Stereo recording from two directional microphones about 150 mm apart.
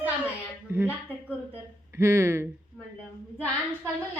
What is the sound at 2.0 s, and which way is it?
Speech, 20° right (ahead or behind).